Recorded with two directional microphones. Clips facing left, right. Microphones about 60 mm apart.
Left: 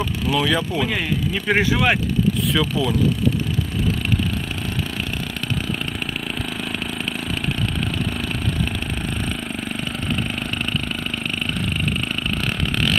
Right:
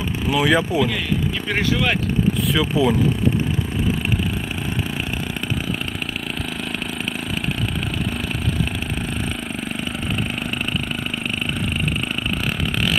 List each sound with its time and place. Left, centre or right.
0.3 s speech: centre
1.5 s speech: centre
2.7 s speech: right